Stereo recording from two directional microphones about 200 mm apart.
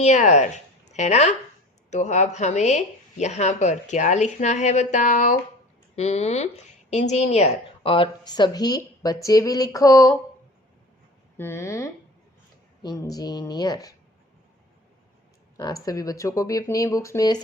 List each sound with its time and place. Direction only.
0.0 s a woman's voice: 35° left (ahead or behind); by 10.2 s 15° left (ahead or behind)
11.3 s speech: 10° left (ahead or behind)
15.5 s speech: 15° left (ahead or behind)